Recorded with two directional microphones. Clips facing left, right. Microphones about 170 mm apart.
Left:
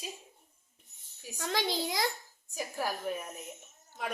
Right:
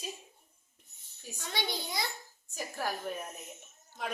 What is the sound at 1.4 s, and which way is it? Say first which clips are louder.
Speech: left 5 dB; 90° left.